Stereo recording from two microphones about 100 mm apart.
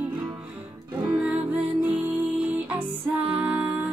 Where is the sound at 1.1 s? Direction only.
15° right (ahead or behind).